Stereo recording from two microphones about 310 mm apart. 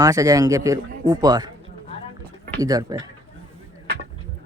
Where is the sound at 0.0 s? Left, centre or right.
Centre.